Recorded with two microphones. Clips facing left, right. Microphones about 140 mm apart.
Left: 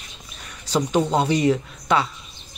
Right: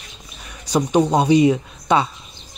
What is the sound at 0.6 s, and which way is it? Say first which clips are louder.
Speech: right 4 dB; 15° right (ahead or behind).